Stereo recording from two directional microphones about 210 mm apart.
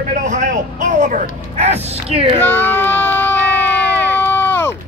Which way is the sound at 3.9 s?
10° left (ahead or behind).